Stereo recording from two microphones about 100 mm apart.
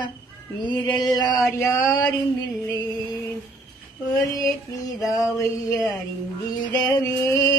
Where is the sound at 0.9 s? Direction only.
45° left (ahead or behind).